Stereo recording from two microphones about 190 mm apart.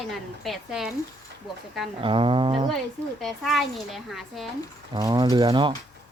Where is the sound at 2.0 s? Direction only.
25° right (ahead or behind).